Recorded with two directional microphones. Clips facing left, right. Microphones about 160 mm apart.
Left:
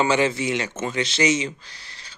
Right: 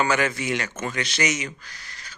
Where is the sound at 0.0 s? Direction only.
25° left (ahead or behind).